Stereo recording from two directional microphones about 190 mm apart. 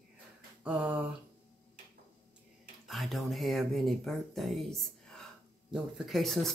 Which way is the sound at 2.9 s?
Centre (ahead or behind).